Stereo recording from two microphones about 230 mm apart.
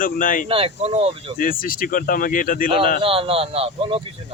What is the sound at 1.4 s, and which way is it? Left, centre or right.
Speech, left.